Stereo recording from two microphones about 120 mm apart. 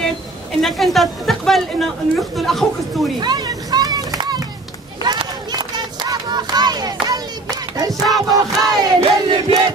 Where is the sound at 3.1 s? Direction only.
35° right (ahead or behind).